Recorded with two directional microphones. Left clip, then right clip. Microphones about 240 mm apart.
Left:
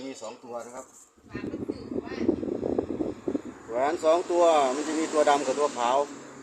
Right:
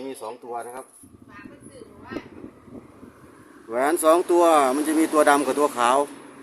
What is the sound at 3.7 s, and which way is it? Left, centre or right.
Speech, right.